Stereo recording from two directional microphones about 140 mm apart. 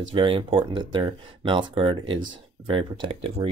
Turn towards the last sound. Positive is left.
turn(degrees=-40)  # may be behind; listen again after turning